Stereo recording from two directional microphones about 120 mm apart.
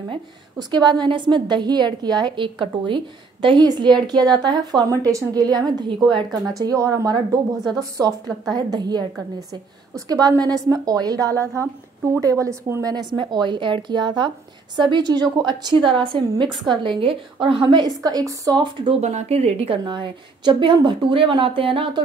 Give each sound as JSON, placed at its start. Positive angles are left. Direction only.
{"t": 0.6, "sound": "a woman's voice", "side_deg": -35}
{"t": 6.6, "sound": "a woman's voice", "side_deg": -25}
{"t": 12.9, "sound": "a woman's voice", "side_deg": -40}
{"t": 18.9, "sound": "a woman's voice", "side_deg": -70}
{"t": 19.8, "sound": "speech", "side_deg": -40}